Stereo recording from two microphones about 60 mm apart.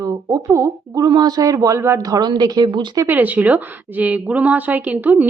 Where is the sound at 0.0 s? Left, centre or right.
Right.